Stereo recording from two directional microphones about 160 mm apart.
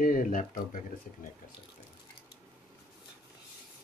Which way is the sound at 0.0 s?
55° left (ahead or behind).